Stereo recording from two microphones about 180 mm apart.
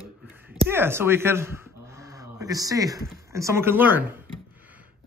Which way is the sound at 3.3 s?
15° right (ahead or behind).